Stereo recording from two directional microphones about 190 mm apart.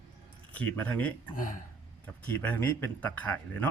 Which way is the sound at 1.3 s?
45° left (ahead or behind).